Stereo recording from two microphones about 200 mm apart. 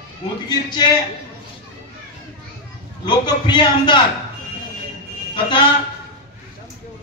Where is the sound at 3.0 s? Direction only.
20° left (ahead or behind).